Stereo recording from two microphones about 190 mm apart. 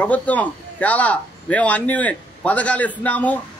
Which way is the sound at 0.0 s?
10° left (ahead or behind).